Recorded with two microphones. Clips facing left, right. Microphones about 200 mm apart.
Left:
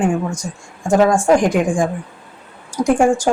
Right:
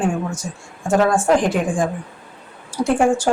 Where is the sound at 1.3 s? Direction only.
15° left (ahead or behind).